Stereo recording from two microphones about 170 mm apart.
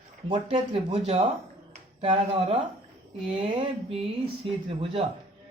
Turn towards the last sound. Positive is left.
turn(degrees=-35)  # may be behind; listen again after turning